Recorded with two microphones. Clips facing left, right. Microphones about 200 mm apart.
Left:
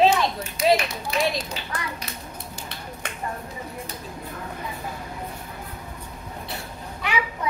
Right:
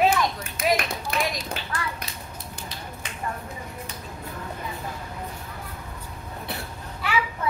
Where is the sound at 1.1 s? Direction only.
55° right (ahead or behind).